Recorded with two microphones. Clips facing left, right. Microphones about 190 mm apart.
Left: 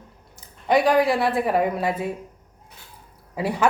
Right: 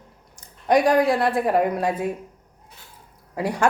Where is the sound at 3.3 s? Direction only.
5° left (ahead or behind).